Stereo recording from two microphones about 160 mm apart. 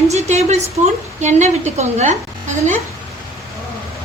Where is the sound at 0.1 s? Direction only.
45° right (ahead or behind).